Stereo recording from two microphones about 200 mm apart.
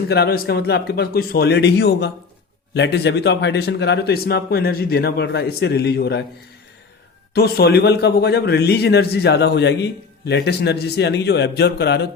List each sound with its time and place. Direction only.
0.1 s a man's voice: 50° left (ahead or behind)
7.3 s a man's voice: 50° left (ahead or behind)